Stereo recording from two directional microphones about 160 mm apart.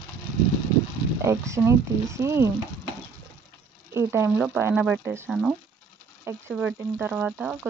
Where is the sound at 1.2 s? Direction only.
20° right (ahead or behind).